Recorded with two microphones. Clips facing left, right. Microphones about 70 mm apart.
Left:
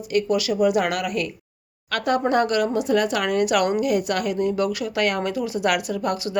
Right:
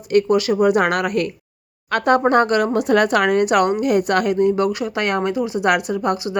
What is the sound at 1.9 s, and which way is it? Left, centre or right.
Speech, right.